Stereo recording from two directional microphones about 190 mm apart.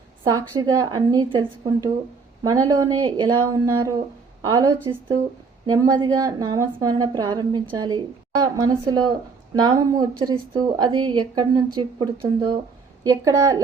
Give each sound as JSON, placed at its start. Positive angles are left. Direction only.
{"t": 0.3, "sound": "a woman's voice", "side_deg": -20}